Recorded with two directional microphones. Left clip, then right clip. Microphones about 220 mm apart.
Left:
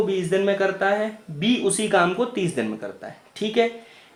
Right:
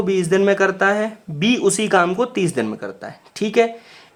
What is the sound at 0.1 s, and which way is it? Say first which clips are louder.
Speech: right 5 dB; 25° right (ahead or behind).